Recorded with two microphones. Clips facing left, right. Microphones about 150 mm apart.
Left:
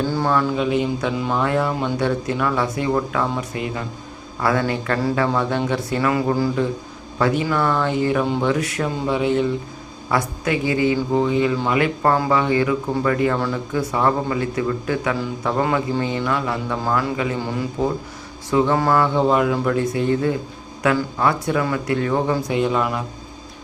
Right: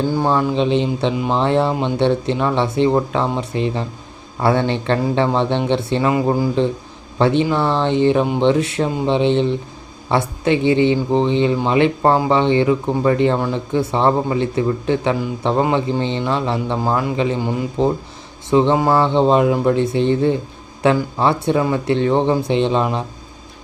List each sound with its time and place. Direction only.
0.0 s a woman's voice: 15° right (ahead or behind)